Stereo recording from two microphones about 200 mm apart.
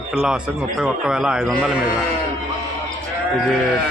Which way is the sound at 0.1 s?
5° right (ahead or behind).